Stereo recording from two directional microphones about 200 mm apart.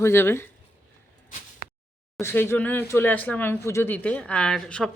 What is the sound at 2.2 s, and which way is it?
Speech, 10° left (ahead or behind).